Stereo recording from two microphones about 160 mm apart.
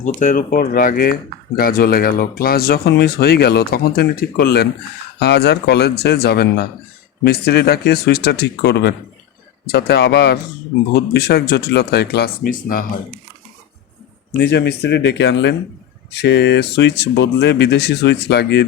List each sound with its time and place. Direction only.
0.0 s speech: 55° left (ahead or behind); by 4.7 s 75° left (ahead or behind)
5.2 s speech: 90° left; by 12.8 s 60° left (ahead or behind)
14.3 s speech: 90° left